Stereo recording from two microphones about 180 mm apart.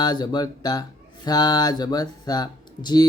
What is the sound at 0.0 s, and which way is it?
Speech, 25° left (ahead or behind).